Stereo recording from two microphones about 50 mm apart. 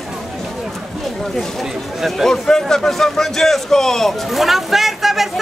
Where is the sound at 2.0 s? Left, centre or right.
Centre.